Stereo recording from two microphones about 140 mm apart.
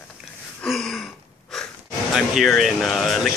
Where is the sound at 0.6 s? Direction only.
5° left (ahead or behind).